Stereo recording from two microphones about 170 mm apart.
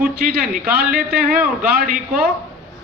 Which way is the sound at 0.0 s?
60° right (ahead or behind).